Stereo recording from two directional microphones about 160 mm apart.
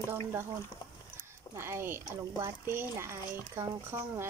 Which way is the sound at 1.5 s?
15° right (ahead or behind).